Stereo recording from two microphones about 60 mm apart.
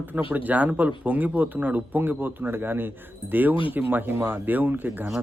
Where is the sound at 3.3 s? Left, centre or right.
Right.